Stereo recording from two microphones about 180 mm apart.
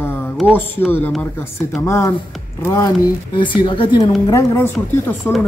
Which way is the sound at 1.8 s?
15° left (ahead or behind).